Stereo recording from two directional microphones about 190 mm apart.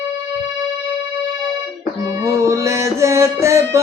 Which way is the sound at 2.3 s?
15° right (ahead or behind).